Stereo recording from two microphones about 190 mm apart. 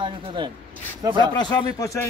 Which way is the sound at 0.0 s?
25° right (ahead or behind).